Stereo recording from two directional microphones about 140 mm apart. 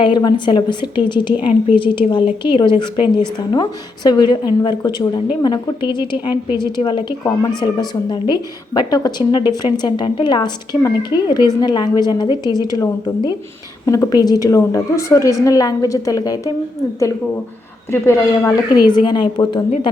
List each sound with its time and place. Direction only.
0.0 s a woman's voice: 30° left (ahead or behind)
18.4 s a woman's voice: 30° left (ahead or behind)